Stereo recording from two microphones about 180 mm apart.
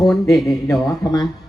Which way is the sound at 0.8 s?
20° left (ahead or behind).